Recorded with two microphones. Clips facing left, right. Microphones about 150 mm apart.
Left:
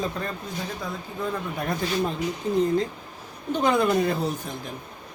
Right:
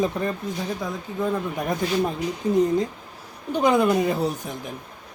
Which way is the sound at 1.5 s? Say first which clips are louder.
Right 3 dB; 15° right (ahead or behind).